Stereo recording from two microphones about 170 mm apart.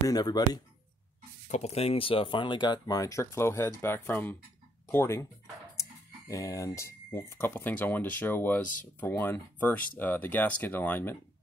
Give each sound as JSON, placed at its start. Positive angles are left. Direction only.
{"t": 0.1, "sound": "speech", "side_deg": 25}
{"t": 1.5, "sound": "speech", "side_deg": 40}